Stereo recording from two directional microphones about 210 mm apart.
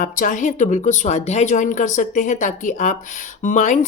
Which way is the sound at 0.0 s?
40° left (ahead or behind).